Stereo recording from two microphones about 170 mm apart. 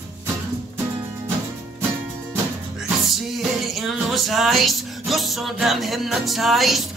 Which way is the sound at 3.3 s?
Centre (ahead or behind).